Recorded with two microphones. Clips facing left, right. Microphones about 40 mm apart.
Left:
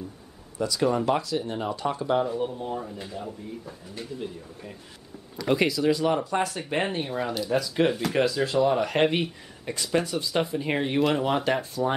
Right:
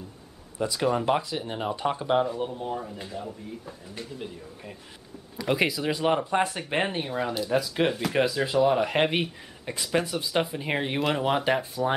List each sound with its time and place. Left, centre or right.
0.6 s speech: right
2.2 s speech: centre
7.1 s speech: centre